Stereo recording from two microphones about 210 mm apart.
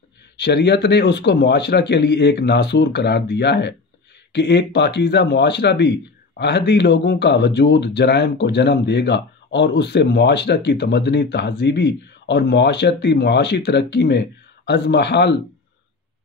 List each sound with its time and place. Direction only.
0.4 s speech: 55° left (ahead or behind)